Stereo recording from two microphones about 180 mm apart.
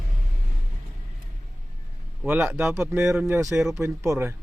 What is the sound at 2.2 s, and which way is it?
A man's voice, 10° right (ahead or behind).